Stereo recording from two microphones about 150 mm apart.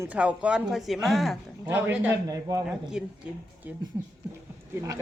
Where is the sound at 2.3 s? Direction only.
25° right (ahead or behind).